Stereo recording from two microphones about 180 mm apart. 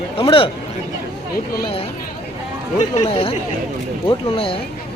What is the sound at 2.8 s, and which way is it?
Speech, 35° left (ahead or behind).